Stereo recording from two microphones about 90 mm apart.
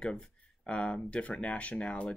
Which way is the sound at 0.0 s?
10° left (ahead or behind).